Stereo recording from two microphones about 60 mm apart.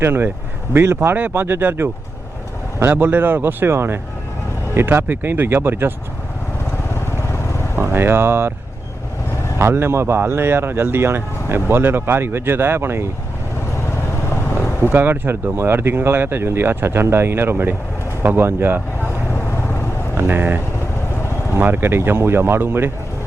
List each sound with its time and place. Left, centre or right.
0.0 s speech: right
0.9 s speech: right
1.3 s speech: right
7.8 s speech: right
9.6 s speech: right
14.8 s speech: right
20.1 s speech: right
21.6 s speech: right